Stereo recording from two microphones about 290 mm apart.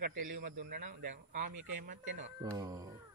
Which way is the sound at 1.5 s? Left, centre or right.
Right.